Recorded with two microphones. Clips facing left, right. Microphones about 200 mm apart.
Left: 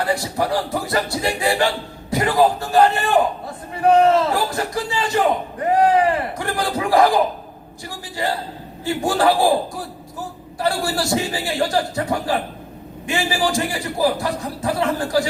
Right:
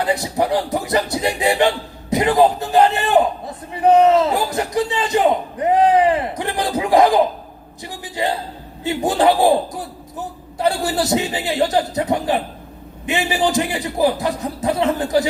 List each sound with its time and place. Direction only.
0.0 s a man's voice: 20° right (ahead or behind)
10.6 s a man's voice: 20° right (ahead or behind)